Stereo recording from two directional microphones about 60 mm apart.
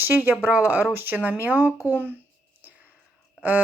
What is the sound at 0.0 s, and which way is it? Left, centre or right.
A woman's voice, right.